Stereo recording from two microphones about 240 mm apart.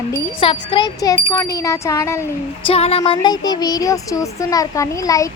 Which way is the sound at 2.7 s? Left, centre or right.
Left.